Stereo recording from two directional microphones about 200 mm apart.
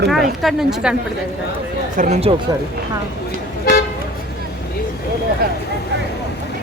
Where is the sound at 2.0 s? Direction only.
30° right (ahead or behind).